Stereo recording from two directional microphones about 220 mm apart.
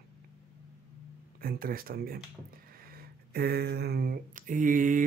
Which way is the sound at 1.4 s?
40° right (ahead or behind).